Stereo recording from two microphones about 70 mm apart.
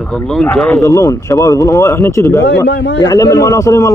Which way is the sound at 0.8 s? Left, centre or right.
Left.